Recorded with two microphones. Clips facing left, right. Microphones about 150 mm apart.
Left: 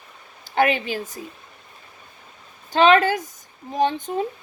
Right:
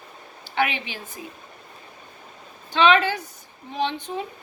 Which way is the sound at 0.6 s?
45° left (ahead or behind).